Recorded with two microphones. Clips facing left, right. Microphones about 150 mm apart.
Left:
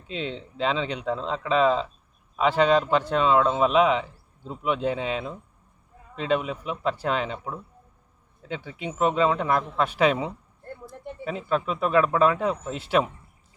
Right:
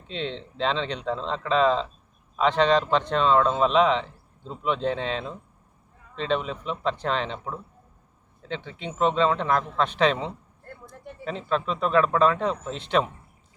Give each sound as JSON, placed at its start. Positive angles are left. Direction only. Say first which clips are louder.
{"t": 0.1, "sound": "speech", "louder": "even", "side_deg": 5}